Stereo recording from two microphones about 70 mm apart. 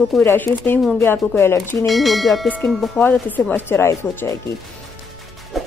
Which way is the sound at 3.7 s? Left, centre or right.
Left.